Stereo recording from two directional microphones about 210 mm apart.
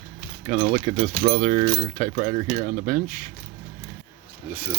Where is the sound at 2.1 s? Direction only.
40° right (ahead or behind).